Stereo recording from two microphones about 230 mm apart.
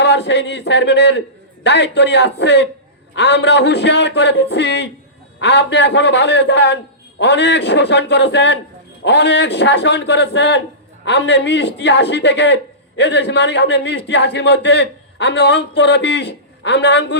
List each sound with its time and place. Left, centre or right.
0.0 s a man's voice: left